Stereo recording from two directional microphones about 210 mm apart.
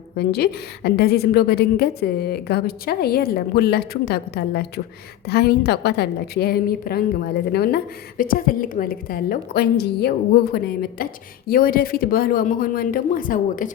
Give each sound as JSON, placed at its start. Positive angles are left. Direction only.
{"t": 0.2, "sound": "a woman's voice", "side_deg": 50}